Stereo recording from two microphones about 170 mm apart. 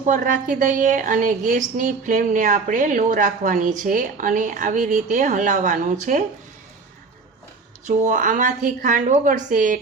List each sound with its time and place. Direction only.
0.0 s a woman's voice: 50° right (ahead or behind)
7.9 s a woman's voice: 50° right (ahead or behind)